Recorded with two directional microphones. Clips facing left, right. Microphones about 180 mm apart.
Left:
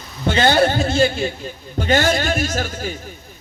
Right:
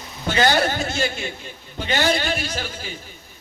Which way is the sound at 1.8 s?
45° left (ahead or behind).